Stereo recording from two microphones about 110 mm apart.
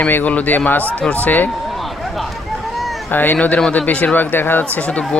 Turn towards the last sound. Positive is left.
turn(degrees=10)  # may be behind; listen again after turning